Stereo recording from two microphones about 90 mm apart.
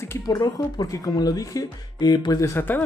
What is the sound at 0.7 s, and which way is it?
Speech, 40° left (ahead or behind).